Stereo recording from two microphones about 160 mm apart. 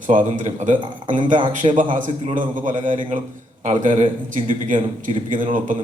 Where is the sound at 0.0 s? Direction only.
50° right (ahead or behind).